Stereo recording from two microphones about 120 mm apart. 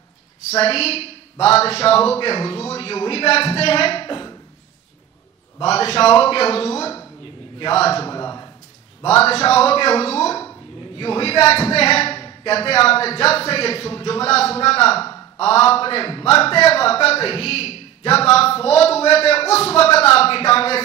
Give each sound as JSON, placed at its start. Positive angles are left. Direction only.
{"t": 0.6, "sound": "a man's voice", "side_deg": 55}
{"t": 5.7, "sound": "a man's voice", "side_deg": 55}
{"t": 8.1, "sound": "a sound", "side_deg": 30}
{"t": 9.0, "sound": "a man's voice", "side_deg": 55}
{"t": 16.4, "sound": "a man's voice", "side_deg": 55}